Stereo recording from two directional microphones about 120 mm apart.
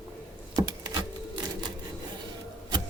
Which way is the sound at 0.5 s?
35° right (ahead or behind).